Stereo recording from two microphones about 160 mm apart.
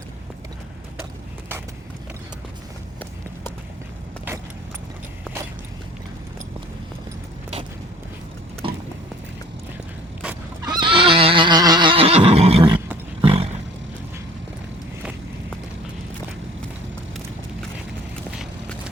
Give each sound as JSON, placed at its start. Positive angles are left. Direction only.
{"t": 8.6, "sound": "a sound", "side_deg": -35}
{"t": 10.7, "sound": "neigh", "side_deg": -30}
{"t": 13.2, "sound": "roaring cats", "side_deg": -35}